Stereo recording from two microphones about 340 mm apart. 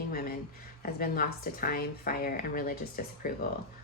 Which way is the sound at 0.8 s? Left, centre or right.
Left.